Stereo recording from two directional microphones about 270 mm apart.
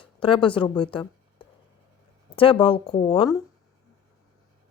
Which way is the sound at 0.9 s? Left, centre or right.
Centre.